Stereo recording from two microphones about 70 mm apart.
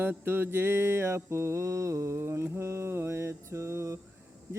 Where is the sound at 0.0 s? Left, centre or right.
Right.